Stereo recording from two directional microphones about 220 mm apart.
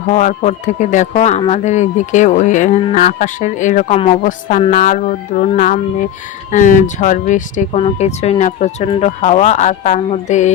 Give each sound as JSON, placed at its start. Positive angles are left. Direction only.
{"t": 0.1, "sound": "speech", "side_deg": 30}